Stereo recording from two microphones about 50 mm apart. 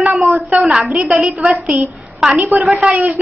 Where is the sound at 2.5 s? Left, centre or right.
Right.